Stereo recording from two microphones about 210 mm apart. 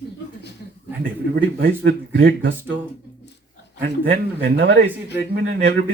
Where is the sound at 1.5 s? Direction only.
55° right (ahead or behind).